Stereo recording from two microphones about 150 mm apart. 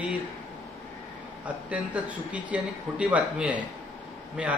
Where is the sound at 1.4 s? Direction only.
10° right (ahead or behind).